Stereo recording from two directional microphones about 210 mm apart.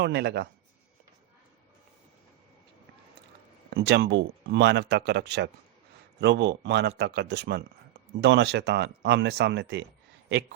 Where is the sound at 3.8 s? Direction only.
50° right (ahead or behind).